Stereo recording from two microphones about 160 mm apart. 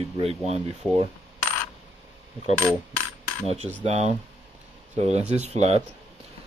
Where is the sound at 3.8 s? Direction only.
45° right (ahead or behind).